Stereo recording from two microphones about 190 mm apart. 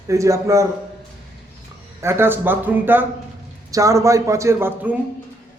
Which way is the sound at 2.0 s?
15° right (ahead or behind).